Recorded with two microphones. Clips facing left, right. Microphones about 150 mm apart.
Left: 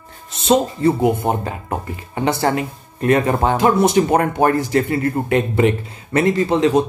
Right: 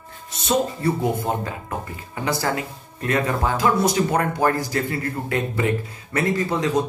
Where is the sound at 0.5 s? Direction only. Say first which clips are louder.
Left 6 dB; 20° left (ahead or behind).